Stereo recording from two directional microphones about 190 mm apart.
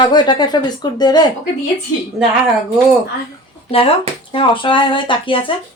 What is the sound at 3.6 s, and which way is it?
Speech, 30° left (ahead or behind).